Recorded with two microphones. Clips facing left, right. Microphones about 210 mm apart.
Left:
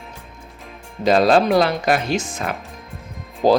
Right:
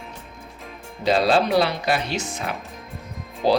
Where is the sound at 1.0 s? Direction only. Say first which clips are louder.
Left 4 dB; 45° left (ahead or behind).